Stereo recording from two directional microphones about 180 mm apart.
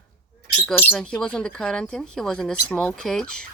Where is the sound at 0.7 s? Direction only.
10° left (ahead or behind).